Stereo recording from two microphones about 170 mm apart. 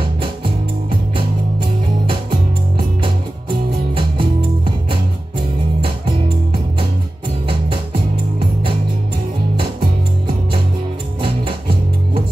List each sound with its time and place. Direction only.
3.9 s music: 30° right (ahead or behind)
5.8 s music: 30° right (ahead or behind)